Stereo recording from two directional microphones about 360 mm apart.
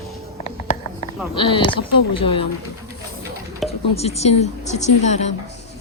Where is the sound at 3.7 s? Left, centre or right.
Centre.